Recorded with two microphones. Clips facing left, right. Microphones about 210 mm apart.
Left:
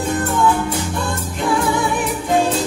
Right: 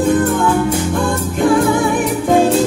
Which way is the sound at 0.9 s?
50° right (ahead or behind).